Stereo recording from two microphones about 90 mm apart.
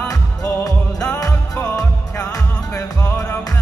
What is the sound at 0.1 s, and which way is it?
Music, 40° left (ahead or behind).